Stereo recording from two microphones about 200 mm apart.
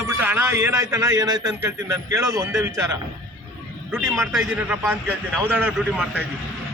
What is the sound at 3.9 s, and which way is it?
A man's voice, 15° right (ahead or behind).